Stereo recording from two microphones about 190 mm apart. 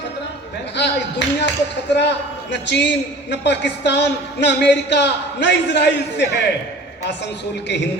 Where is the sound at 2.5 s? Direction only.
65° left (ahead or behind).